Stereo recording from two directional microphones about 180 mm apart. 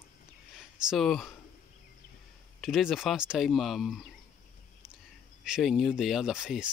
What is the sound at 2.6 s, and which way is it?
Speech, centre (ahead or behind).